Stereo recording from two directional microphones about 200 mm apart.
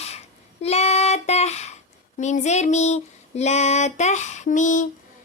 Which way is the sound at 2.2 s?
35° left (ahead or behind).